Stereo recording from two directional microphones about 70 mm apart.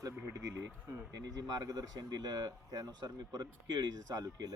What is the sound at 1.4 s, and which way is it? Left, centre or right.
Speech, right.